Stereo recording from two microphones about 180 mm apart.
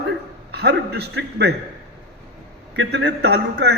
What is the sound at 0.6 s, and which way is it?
Speech, 65° right (ahead or behind).